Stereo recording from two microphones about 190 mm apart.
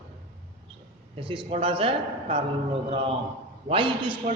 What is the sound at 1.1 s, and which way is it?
A man's voice, 30° right (ahead or behind).